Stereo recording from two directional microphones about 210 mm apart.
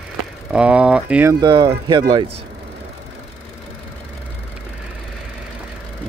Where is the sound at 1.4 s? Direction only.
25° right (ahead or behind).